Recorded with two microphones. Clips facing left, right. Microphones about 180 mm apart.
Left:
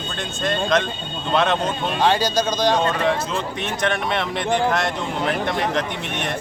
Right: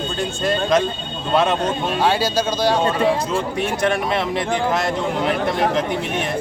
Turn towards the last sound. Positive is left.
turn(degrees=-5)  # may be behind; listen again after turning